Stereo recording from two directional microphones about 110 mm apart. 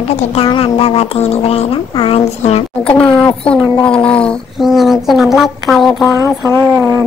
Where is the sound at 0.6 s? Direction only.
65° left (ahead or behind).